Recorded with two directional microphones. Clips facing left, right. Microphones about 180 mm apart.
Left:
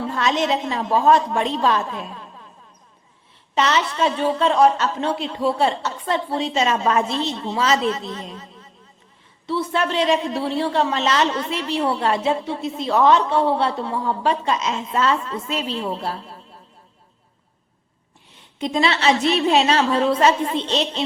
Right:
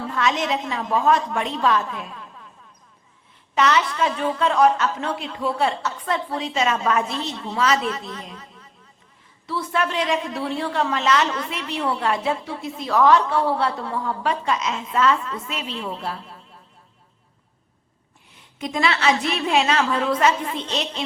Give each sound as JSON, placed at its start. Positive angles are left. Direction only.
{"t": 0.1, "sound": "a woman's voice", "side_deg": 30}
{"t": 3.5, "sound": "a man's voice", "side_deg": 25}
{"t": 18.6, "sound": "a man's voice", "side_deg": 25}